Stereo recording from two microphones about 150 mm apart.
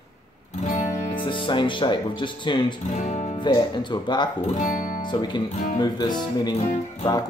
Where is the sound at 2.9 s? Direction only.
50° left (ahead or behind).